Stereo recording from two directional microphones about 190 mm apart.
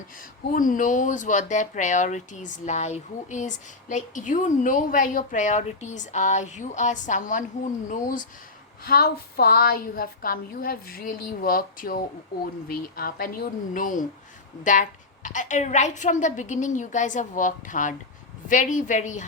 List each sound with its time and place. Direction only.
0.5 s a woman's voice: 45° left (ahead or behind)
8.9 s a woman's voice: 55° left (ahead or behind)